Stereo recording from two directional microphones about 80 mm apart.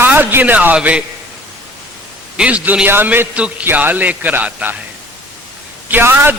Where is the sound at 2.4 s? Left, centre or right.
Centre.